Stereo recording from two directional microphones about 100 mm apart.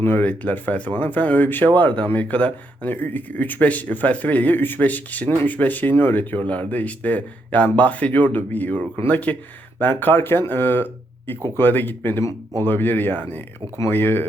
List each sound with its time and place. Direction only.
0.0 s speech: 20° left (ahead or behind)